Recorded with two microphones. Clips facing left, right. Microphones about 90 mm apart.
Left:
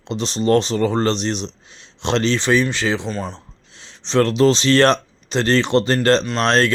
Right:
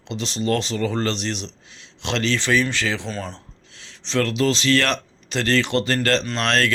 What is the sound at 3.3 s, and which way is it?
Speech, 25° left (ahead or behind).